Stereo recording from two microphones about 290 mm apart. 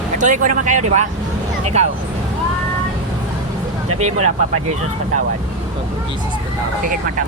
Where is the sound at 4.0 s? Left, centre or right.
Right.